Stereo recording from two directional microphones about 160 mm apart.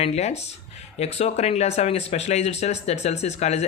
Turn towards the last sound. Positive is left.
turn(degrees=45)  # may be behind; listen again after turning